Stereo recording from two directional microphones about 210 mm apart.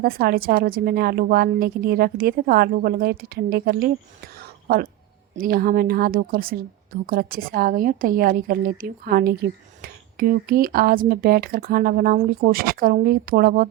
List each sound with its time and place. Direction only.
0.0 s speech: 45° right (ahead or behind)
5.4 s speech: 45° right (ahead or behind)